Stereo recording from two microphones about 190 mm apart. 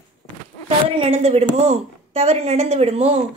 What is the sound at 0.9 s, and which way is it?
A woman's voice, 30° right (ahead or behind).